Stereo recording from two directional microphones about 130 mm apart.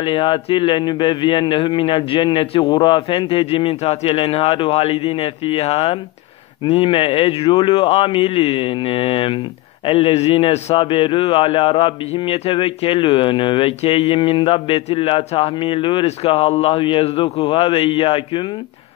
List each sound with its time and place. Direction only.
0.0 s a man's voice: 40° left (ahead or behind)